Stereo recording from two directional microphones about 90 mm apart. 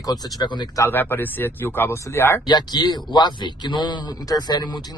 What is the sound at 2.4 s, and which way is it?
A man's voice, 50° left (ahead or behind).